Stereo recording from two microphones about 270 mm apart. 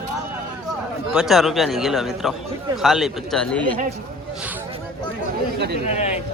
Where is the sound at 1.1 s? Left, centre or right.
Centre.